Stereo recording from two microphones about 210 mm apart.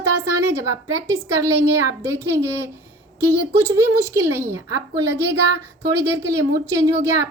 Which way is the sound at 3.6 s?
10° right (ahead or behind).